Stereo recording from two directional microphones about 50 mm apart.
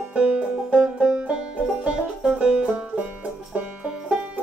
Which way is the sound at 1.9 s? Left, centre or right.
Right.